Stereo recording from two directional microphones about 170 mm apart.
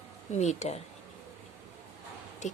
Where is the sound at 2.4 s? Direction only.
45° left (ahead or behind).